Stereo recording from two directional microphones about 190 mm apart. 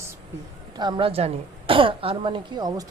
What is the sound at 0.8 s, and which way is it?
Speech, 25° right (ahead or behind).